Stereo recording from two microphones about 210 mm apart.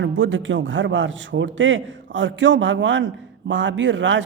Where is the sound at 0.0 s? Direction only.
65° right (ahead or behind).